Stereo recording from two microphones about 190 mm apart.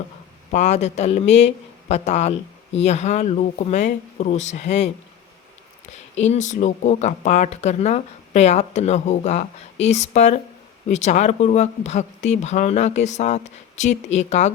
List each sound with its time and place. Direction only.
0.5 s speech: 35° left (ahead or behind)
5.9 s speech: 35° left (ahead or behind)